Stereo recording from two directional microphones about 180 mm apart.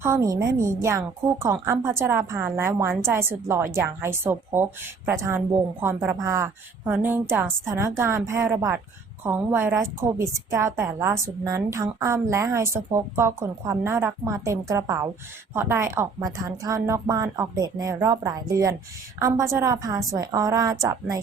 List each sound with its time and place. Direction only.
0.0 s a woman's voice: 15° right (ahead or behind)